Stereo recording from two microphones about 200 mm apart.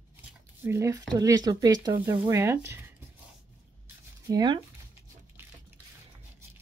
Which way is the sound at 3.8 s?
20° right (ahead or behind).